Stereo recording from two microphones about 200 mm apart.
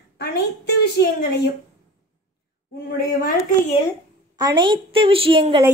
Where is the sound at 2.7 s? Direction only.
50° left (ahead or behind).